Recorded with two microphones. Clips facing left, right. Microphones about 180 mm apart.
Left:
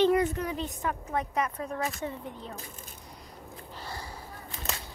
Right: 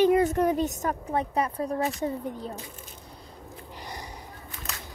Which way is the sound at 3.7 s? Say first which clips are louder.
Even; 15° right (ahead or behind).